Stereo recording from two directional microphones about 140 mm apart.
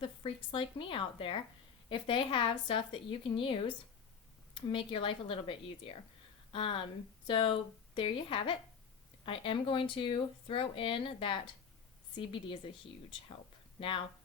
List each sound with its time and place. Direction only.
0.0 s speech: 40° left (ahead or behind)
13.7 s speech: 40° left (ahead or behind)